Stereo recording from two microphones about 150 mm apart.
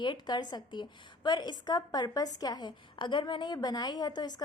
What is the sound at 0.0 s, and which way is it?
A woman's voice, 30° left (ahead or behind).